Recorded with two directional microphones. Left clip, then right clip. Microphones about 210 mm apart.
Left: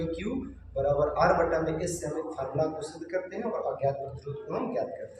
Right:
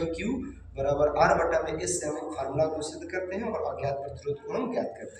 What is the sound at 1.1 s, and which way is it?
Speech, 15° left (ahead or behind).